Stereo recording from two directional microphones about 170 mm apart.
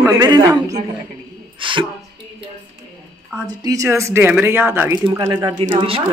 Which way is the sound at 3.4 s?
20° right (ahead or behind).